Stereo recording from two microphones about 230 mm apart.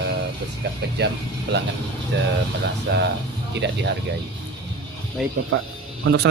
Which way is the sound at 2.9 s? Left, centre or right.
Right.